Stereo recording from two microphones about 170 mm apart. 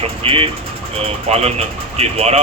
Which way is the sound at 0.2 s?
35° right (ahead or behind).